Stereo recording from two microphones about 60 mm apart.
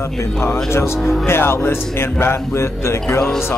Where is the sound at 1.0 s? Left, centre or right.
Centre.